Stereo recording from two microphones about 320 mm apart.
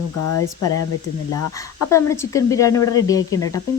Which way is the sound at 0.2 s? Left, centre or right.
Left.